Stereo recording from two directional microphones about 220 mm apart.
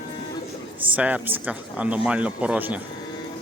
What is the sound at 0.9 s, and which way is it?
Speech, 5° right (ahead or behind).